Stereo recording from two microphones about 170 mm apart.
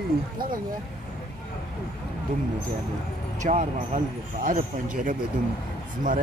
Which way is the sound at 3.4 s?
45° right (ahead or behind).